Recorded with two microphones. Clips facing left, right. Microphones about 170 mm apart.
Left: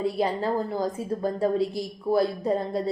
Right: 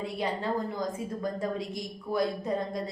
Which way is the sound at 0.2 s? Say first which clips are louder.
Left 1 dB; 35° left (ahead or behind).